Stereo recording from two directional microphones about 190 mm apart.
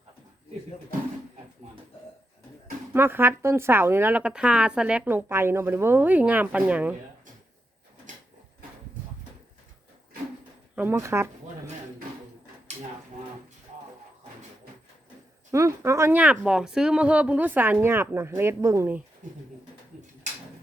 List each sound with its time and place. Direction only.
2.9 s speech: 10° right (ahead or behind)
10.8 s speech: 10° right (ahead or behind)
12.7 s a sound: 35° right (ahead or behind)
15.5 s speech: 15° right (ahead or behind)